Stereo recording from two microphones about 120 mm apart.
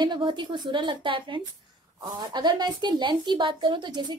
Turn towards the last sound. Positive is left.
turn(degrees=-40)  # may be behind; listen again after turning